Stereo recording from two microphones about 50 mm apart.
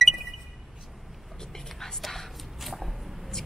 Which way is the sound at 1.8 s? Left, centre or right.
Centre.